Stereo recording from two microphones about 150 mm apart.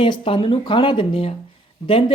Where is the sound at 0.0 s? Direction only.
35° left (ahead or behind).